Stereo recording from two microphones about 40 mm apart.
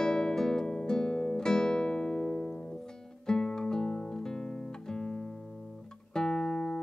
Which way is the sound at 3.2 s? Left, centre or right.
Centre.